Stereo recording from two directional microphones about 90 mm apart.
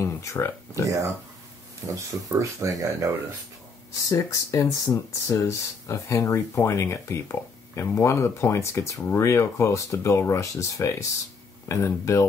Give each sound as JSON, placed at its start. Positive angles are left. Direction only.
{"t": 0.0, "sound": "a sound", "side_deg": 30}
{"t": 1.8, "sound": "speech", "side_deg": -30}
{"t": 4.1, "sound": "speech", "side_deg": 35}